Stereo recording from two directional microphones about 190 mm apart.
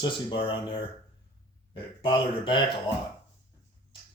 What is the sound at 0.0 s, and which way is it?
Speech, 25° left (ahead or behind).